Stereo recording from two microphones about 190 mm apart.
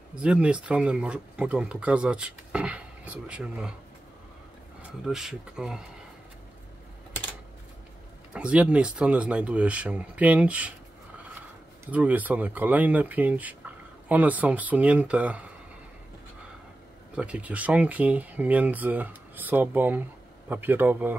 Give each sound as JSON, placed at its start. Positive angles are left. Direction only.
{"t": 0.2, "sound": "speech", "side_deg": -5}
{"t": 5.0, "sound": "speech", "side_deg": 0}
{"t": 8.3, "sound": "speech", "side_deg": -5}
{"t": 11.9, "sound": "speech", "side_deg": -10}
{"t": 17.1, "sound": "speech", "side_deg": -5}